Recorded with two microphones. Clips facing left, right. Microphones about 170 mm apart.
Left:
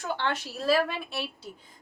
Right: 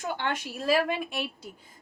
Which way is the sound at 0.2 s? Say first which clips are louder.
Left 1 dB; 15° right (ahead or behind).